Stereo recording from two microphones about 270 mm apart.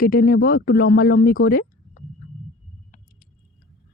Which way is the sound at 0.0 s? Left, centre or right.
Left.